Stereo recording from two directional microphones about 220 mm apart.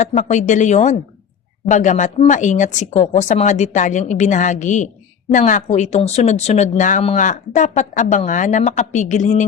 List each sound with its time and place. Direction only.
0.0 s speech: 35° left (ahead or behind)